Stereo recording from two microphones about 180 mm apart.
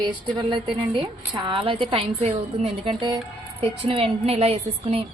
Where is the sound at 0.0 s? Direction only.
25° right (ahead or behind).